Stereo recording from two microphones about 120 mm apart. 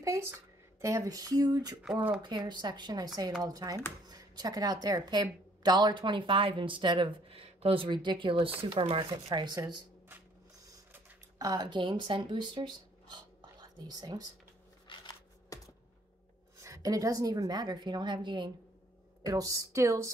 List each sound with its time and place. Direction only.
0.0 s a woman's voice: 25° right (ahead or behind)
11.3 s speech: 35° right (ahead or behind)
14.9 s shuffling cards: 35° left (ahead or behind)
16.5 s a woman's voice: 25° right (ahead or behind)
19.2 s speech: 30° right (ahead or behind)